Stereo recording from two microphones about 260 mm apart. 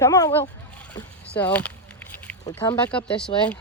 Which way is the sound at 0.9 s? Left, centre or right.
Centre.